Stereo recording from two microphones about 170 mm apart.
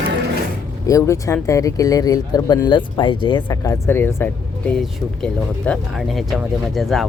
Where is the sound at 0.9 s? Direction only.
20° left (ahead or behind).